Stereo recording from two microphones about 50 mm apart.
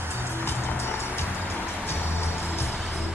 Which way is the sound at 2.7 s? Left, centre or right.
Centre.